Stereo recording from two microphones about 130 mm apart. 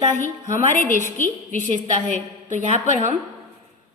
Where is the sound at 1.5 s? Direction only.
70° right (ahead or behind).